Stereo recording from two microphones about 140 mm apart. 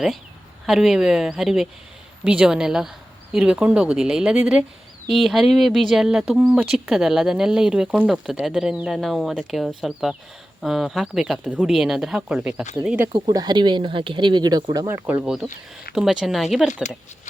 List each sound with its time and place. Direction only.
0.6 s speech: centre (ahead or behind)
13.1 s speech: 30° right (ahead or behind)
15.0 s speech: 10° right (ahead or behind)
15.4 s speech: 90° left
16.0 s speech: centre (ahead or behind)